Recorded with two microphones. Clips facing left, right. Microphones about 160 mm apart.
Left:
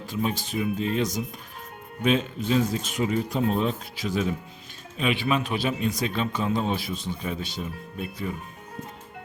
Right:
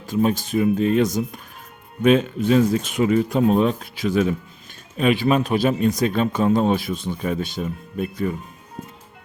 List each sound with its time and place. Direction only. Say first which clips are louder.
0.1 s a man's voice: right 8 dB; 45° right (ahead or behind)
4.9 s a man's voice: right 7 dB; 45° right (ahead or behind)